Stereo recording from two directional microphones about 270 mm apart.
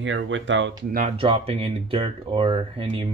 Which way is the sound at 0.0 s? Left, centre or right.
Right.